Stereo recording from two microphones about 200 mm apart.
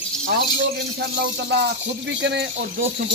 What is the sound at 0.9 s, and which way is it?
Speech, 55° right (ahead or behind).